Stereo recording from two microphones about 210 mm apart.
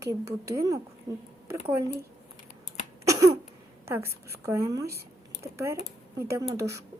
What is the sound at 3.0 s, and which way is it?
Cough, 15° right (ahead or behind).